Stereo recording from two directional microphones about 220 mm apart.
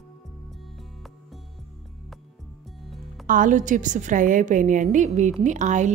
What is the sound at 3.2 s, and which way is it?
A woman's voice, 35° right (ahead or behind).